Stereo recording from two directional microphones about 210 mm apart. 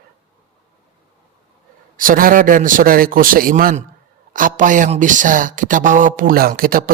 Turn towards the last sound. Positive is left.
turn(degrees=-45)  # may be behind; listen again after turning